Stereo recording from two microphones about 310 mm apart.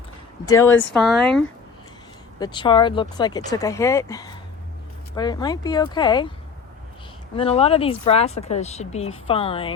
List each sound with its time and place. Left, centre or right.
0.4 s speech: centre
0.7 s speech: left
0.9 s speech: centre
2.4 s speech: centre
7.3 s speech: centre